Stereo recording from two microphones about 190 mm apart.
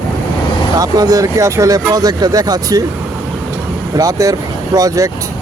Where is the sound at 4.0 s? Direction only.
20° right (ahead or behind).